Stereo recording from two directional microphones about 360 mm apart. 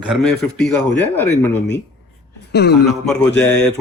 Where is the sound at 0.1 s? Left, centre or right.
Centre.